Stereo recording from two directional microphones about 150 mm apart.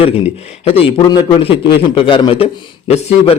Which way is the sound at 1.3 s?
35° left (ahead or behind).